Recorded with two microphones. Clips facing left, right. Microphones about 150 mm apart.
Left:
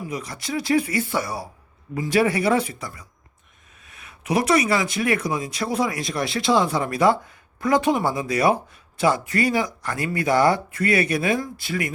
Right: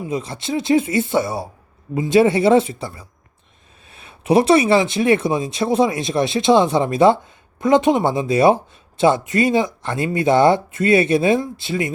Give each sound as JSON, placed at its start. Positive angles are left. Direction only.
{"t": 0.0, "sound": "speech", "side_deg": -25}